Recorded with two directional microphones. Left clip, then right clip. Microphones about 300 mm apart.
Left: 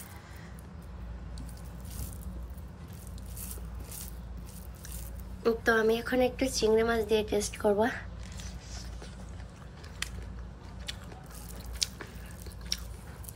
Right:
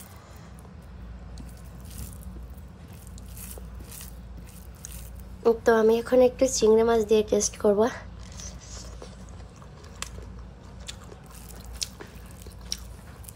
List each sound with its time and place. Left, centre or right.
5.4 s speech: centre
11.8 s biting: centre